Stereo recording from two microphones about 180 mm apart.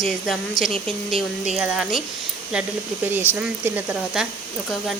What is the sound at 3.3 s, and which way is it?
Speech, 10° right (ahead or behind).